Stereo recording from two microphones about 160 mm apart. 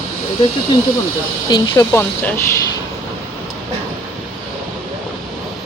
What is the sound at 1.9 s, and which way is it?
Speech, 15° left (ahead or behind).